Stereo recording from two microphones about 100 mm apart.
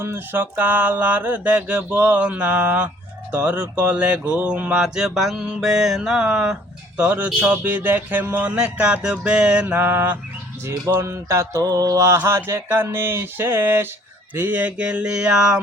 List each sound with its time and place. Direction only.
0.0 s speech: 20° right (ahead or behind)
9.8 s mantra: 25° right (ahead or behind)
14.3 s speech: 20° right (ahead or behind)